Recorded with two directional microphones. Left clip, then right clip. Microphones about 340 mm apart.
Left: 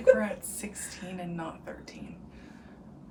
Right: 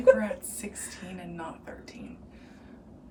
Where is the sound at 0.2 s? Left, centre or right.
Centre.